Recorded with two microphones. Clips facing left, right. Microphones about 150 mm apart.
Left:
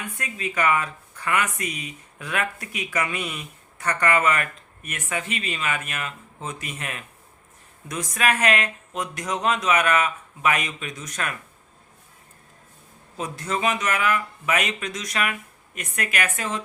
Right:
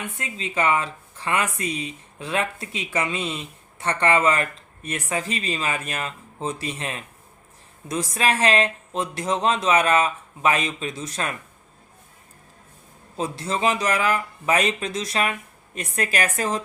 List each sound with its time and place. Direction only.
0.2 s speech: 25° right (ahead or behind)
13.1 s speech: 30° right (ahead or behind)